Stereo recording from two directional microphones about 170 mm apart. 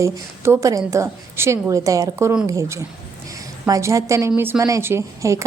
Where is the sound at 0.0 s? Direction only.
15° right (ahead or behind).